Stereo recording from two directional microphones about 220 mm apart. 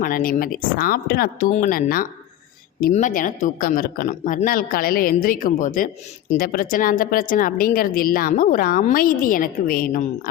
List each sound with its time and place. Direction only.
0.0 s speech: 40° left (ahead or behind)